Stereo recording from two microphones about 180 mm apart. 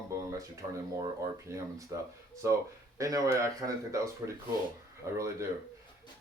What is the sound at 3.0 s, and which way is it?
Speech, 20° right (ahead or behind).